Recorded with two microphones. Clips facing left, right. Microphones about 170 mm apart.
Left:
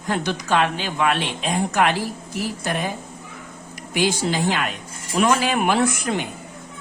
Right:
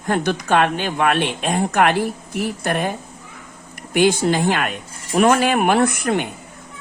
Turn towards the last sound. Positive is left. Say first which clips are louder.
# right 3 dB
turn(degrees=-60)  # may be behind; listen again after turning